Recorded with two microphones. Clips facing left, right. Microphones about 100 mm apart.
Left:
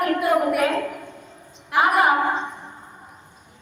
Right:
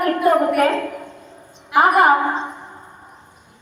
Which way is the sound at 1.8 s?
45° right (ahead or behind).